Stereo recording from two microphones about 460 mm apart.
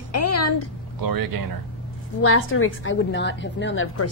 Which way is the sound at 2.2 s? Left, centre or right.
Left.